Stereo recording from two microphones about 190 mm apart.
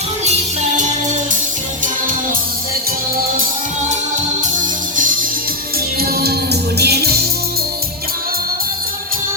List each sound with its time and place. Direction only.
6.0 s music: 55° right (ahead or behind)